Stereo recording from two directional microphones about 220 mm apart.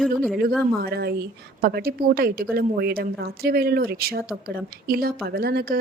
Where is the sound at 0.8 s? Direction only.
45° right (ahead or behind).